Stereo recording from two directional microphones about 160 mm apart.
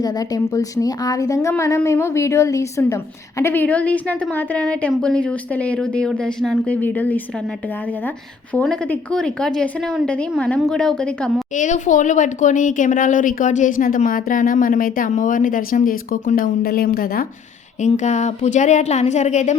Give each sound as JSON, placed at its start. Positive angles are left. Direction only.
{"t": 0.0, "sound": "a woman's voice", "side_deg": 25}
{"t": 8.5, "sound": "a woman's voice", "side_deg": 5}
{"t": 11.5, "sound": "speech", "side_deg": 50}
{"t": 17.7, "sound": "speech", "side_deg": 45}